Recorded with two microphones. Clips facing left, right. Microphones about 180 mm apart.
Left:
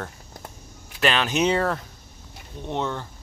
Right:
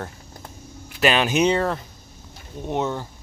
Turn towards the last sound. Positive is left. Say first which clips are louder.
# right 3 dB
turn(degrees=-10)  # may be behind; listen again after turning